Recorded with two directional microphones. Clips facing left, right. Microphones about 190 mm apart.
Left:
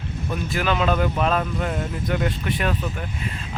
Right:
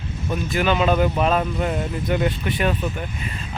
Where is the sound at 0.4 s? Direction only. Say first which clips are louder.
Right 3 dB; centre (ahead or behind).